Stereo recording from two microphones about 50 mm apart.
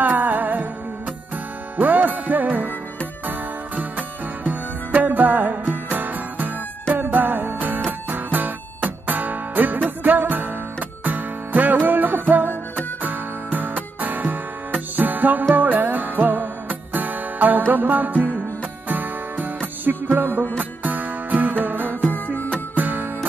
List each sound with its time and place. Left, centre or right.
0.0 s music: right
1.8 s music: right
22.1 s music: left
22.8 s music: right